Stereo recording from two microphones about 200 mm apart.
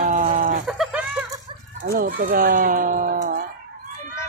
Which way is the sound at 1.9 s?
45° right (ahead or behind).